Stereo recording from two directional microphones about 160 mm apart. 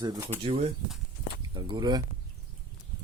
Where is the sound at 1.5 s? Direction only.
25° right (ahead or behind).